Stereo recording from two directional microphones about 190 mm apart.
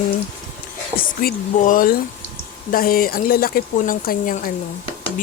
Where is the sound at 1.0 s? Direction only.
45° left (ahead or behind).